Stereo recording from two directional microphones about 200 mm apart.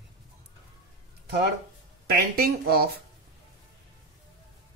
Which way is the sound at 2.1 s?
50° right (ahead or behind).